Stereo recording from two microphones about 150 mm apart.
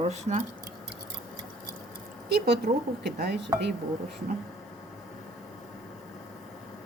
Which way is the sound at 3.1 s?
90° right.